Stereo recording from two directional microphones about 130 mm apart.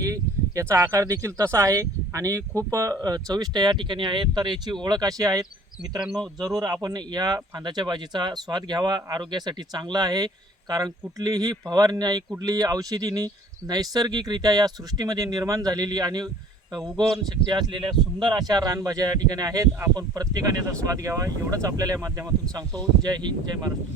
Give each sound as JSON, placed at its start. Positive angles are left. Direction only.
{"t": 0.0, "sound": "speech", "side_deg": -25}
{"t": 17.2, "sound": "speech", "side_deg": -35}